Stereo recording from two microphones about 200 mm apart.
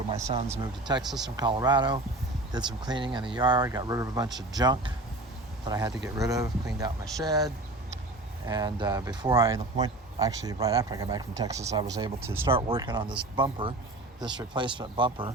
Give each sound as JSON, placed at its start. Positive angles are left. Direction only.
{"t": 0.6, "sound": "speech", "side_deg": -20}
{"t": 8.4, "sound": "speech", "side_deg": -20}
{"t": 12.5, "sound": "speech", "side_deg": -25}